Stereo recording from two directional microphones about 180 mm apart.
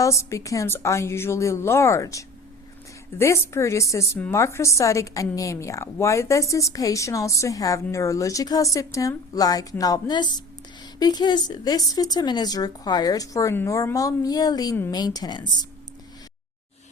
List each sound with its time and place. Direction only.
0.0 s a woman's voice: 15° left (ahead or behind)